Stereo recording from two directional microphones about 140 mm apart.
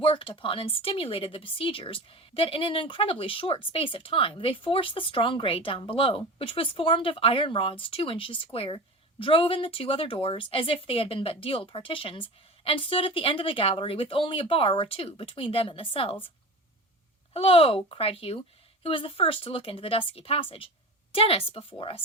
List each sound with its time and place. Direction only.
0.0 s speech: 40° left (ahead or behind)
17.3 s speech: 40° left (ahead or behind)